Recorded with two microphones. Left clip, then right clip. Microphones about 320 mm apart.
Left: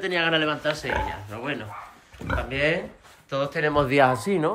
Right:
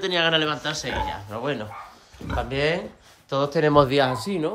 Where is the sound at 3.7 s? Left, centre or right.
Right.